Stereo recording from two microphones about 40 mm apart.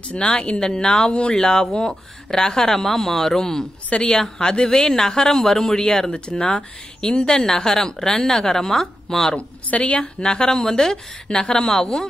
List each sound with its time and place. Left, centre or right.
0.1 s speech: left
9.7 s a woman's voice: left; by 12.1 s centre